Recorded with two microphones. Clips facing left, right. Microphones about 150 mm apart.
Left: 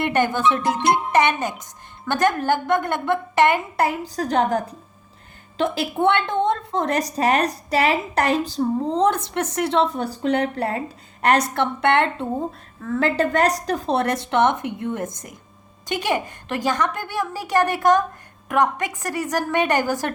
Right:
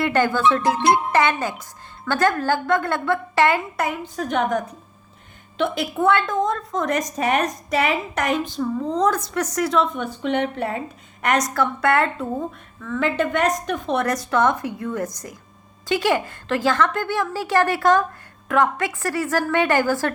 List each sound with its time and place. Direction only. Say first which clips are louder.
0.0 s a woman's voice: right 1 dB; 20° left (ahead or behind)
0.6 s music: right 2 dB; 50° right (ahead or behind)
1.1 s a woman's voice: left 1 dB; 20° left (ahead or behind)
3.8 s a woman's voice: left 3 dB; 35° left (ahead or behind); by 20.1 s 15° left (ahead or behind)